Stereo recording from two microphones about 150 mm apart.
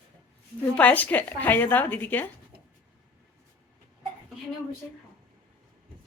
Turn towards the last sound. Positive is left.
turn(degrees=10)  # may be behind; listen again after turning